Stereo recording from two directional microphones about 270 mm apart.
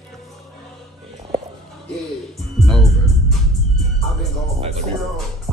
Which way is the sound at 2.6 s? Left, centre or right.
Centre.